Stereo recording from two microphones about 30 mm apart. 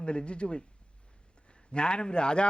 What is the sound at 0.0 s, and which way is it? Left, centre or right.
A man's voice, left.